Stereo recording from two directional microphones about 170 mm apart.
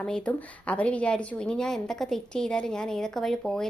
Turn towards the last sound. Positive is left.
turn(degrees=5)  # may be behind; listen again after turning